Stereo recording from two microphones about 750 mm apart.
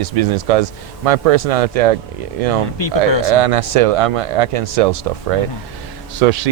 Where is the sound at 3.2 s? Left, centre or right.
Right.